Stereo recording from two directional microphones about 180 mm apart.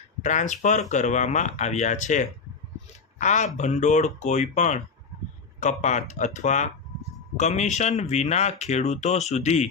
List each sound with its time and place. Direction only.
0.2 s speech: 45° left (ahead or behind)